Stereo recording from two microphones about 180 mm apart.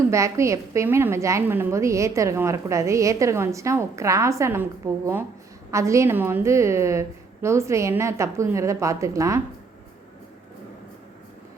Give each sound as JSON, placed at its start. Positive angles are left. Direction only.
{"t": 0.1, "sound": "a woman's voice", "side_deg": -15}